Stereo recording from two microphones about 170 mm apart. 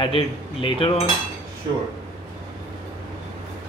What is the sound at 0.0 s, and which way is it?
Speech, 30° left (ahead or behind).